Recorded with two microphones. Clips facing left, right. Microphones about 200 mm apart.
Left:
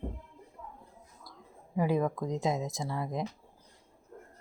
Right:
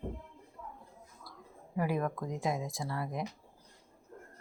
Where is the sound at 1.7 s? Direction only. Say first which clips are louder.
Left 4 dB; 20° left (ahead or behind).